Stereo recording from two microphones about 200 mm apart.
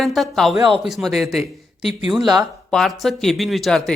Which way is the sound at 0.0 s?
Centre (ahead or behind).